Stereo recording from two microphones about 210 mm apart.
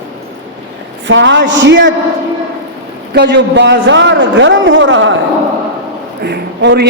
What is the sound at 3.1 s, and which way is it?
A man's voice, 55° right (ahead or behind).